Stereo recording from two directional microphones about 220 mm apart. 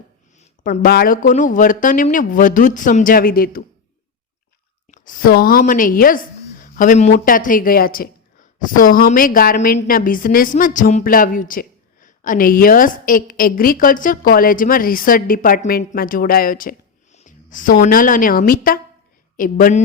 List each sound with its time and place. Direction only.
0.3 s a woman's voice: 35° left (ahead or behind)
4.9 s a woman's voice: 35° left (ahead or behind)